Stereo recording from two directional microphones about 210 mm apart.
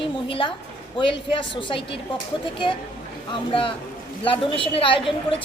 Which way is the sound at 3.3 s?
25° left (ahead or behind).